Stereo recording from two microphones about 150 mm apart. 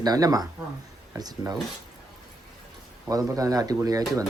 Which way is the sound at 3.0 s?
25° right (ahead or behind).